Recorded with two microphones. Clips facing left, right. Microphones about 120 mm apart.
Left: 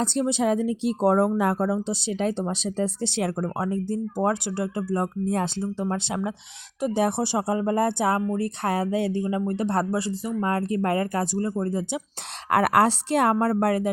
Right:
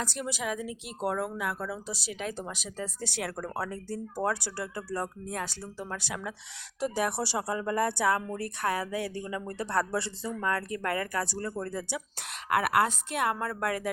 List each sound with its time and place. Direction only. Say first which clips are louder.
0.0 s speech: left 10 dB; 25° left (ahead or behind)
10.4 s speech: left 6 dB; 25° left (ahead or behind)
12.5 s a woman's voice: left 6 dB; 40° left (ahead or behind)